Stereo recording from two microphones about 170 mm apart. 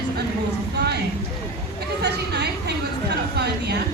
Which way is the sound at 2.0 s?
80° right.